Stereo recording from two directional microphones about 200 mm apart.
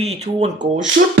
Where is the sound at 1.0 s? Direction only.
45° right (ahead or behind).